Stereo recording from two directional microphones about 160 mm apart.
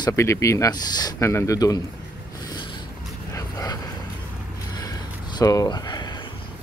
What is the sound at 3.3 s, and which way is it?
Dog, 25° left (ahead or behind).